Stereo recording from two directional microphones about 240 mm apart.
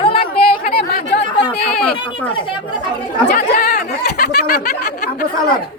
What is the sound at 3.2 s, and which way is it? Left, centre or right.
Speech, left.